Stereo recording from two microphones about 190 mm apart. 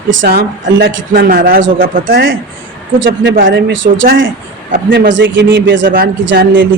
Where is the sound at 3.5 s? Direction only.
75° right (ahead or behind).